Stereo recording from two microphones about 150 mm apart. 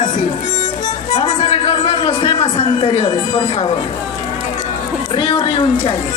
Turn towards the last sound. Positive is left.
turn(degrees=30)  # may be behind; listen again after turning